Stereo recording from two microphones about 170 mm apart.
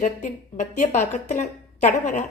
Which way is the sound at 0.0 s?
45° left (ahead or behind).